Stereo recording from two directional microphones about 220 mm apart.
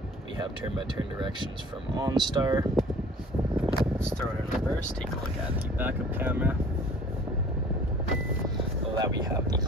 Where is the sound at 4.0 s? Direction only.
Centre (ahead or behind).